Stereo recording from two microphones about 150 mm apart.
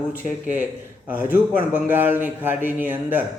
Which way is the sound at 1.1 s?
10° right (ahead or behind).